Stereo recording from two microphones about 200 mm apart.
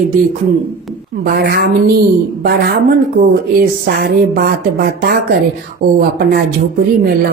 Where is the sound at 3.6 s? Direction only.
50° right (ahead or behind).